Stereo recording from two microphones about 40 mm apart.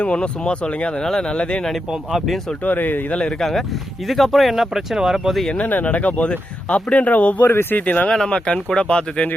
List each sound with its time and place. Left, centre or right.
0.0 s speech: left
2.1 s speech: centre
2.6 s speech: left
3.1 s speech: left
4.1 s speech: centre
5.5 s speech: left
7.4 s speech: left
8.0 s speech: centre